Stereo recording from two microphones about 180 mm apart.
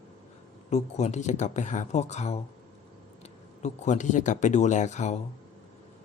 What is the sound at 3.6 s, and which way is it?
Speech, 40° left (ahead or behind).